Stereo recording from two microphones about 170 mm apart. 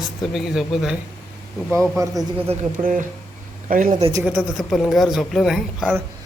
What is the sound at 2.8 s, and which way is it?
Speech, 50° right (ahead or behind).